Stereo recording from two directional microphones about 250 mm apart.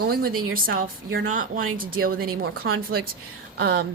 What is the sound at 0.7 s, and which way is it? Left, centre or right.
Speech, right.